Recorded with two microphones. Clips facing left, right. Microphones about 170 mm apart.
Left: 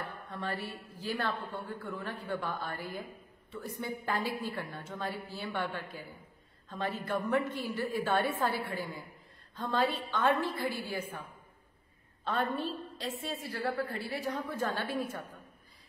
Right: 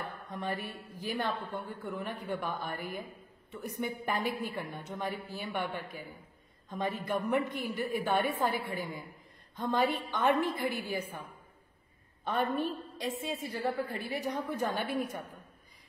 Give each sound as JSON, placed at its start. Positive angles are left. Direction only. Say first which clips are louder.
{"t": 0.0, "sound": "a woman's voice", "louder": "right 1 dB", "side_deg": -15}
{"t": 12.3, "sound": "a woman's voice", "louder": "right 2 dB", "side_deg": -15}